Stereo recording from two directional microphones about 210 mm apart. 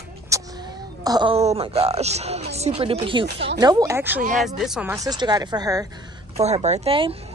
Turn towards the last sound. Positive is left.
turn(degrees=-25)  # may be behind; listen again after turning